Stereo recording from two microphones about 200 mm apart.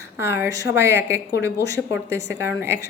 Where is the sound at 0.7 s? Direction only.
10° right (ahead or behind).